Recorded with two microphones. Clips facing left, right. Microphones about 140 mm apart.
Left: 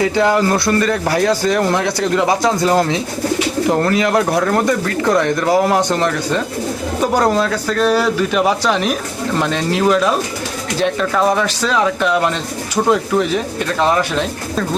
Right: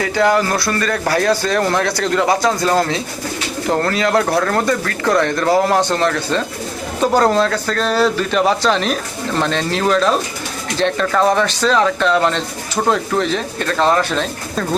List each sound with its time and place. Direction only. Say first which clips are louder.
0.0 s a man's voice: left 1 dB; 20° left (ahead or behind)